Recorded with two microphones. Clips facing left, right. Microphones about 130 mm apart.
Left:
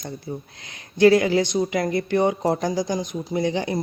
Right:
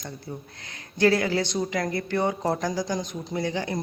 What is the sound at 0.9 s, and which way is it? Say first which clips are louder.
Speech: left 6 dB; 15° left (ahead or behind).